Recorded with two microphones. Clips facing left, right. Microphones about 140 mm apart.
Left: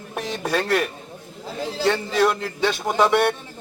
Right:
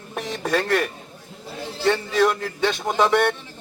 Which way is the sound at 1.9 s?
10° left (ahead or behind).